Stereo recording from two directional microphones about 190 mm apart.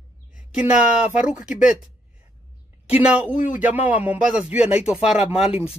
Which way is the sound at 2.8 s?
5° right (ahead or behind).